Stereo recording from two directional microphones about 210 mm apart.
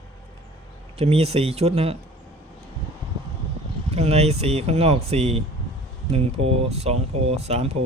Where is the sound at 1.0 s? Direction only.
30° right (ahead or behind).